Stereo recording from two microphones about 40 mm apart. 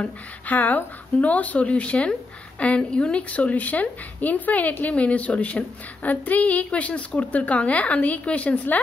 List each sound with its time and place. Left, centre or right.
0.0 s a woman's voice: left